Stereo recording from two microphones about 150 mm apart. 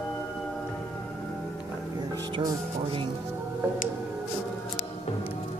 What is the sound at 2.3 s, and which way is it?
Music, 35° right (ahead or behind).